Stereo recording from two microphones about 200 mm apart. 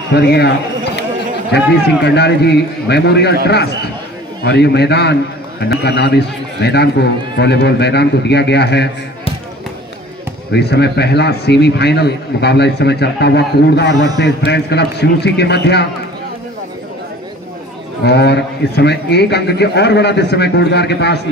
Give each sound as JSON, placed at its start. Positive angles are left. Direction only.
{"t": 0.1, "sound": "a man's voice", "side_deg": 55}
{"t": 10.5, "sound": "a man's voice", "side_deg": 55}
{"t": 18.0, "sound": "a man's voice", "side_deg": 55}